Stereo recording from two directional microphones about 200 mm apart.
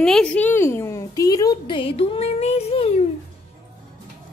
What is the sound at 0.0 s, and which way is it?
A woman's voice, 5° left (ahead or behind).